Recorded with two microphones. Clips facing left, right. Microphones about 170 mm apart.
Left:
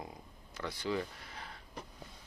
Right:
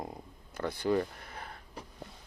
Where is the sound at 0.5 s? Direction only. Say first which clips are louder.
Right 6 dB; 55° right (ahead or behind).